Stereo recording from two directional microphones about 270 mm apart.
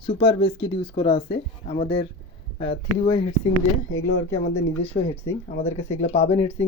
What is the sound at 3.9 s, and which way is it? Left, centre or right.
Speech, left.